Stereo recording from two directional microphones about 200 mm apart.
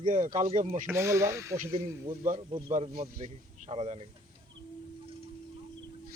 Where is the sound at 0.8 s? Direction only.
15° right (ahead or behind).